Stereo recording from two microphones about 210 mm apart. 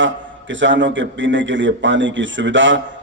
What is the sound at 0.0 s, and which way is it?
A man's voice, 60° right (ahead or behind).